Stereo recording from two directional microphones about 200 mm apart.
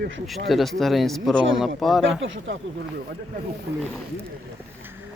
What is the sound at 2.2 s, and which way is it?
Speech, 70° right (ahead or behind).